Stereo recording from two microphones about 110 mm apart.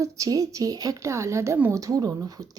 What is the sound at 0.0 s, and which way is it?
A woman's voice, 30° right (ahead or behind).